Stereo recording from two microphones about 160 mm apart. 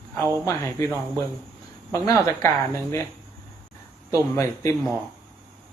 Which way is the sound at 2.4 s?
20° left (ahead or behind).